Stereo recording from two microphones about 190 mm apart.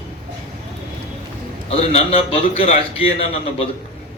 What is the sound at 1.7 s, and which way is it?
A man's voice, 35° left (ahead or behind).